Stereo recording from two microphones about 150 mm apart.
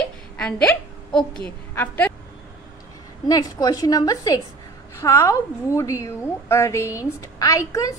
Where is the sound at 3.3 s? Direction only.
25° left (ahead or behind).